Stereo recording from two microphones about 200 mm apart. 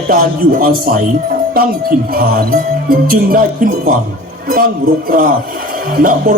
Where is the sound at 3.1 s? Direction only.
45° right (ahead or behind).